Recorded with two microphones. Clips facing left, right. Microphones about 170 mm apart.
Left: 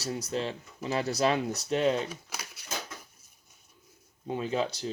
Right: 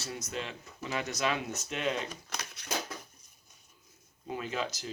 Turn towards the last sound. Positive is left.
turn(degrees=30)  # may be behind; listen again after turning